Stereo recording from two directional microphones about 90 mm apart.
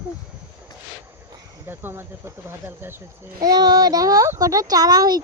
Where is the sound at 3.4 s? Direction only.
50° right (ahead or behind).